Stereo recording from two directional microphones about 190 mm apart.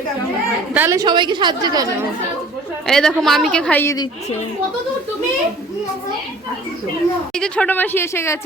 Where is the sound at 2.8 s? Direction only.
5° left (ahead or behind).